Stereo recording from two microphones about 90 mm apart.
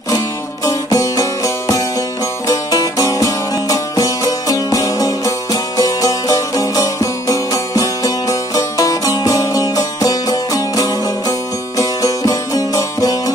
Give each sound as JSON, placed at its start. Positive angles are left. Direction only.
{"t": 0.7, "sound": "music", "side_deg": 40}